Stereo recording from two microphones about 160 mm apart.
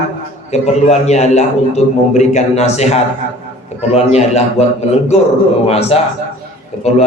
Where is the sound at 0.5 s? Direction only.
45° left (ahead or behind).